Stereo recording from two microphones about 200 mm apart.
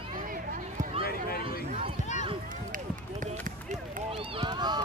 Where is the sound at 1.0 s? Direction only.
50° left (ahead or behind).